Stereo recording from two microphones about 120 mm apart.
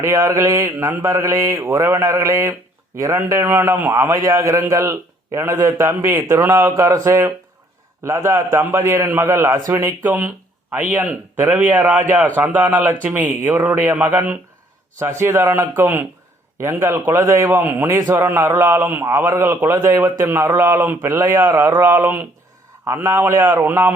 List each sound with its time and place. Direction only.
0.0 s a man's voice: 20° right (ahead or behind)
4.1 s a man's voice: 30° right (ahead or behind)
10.0 s a man's voice: 15° right (ahead or behind)